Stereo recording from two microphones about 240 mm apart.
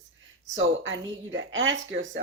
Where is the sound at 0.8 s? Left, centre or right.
Right.